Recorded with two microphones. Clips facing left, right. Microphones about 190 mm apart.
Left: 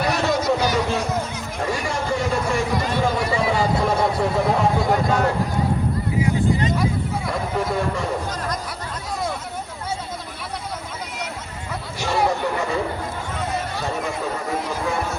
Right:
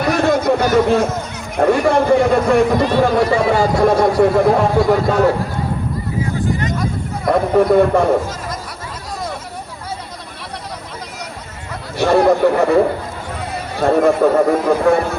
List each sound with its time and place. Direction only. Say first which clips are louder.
0.0 s a sound: right 6 dB; 55° right (ahead or behind)
1.5 s speech: right 13 dB; 60° right (ahead or behind)
7.3 s speech: right 14 dB; 60° right (ahead or behind)
11.9 s speech: right 10 dB; 60° right (ahead or behind)